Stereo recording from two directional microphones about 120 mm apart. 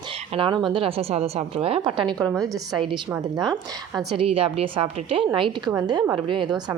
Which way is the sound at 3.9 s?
Centre (ahead or behind).